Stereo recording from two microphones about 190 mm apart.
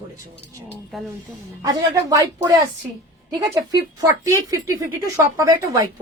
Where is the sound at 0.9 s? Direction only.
Centre (ahead or behind).